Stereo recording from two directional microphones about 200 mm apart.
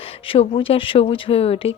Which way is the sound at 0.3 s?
25° left (ahead or behind).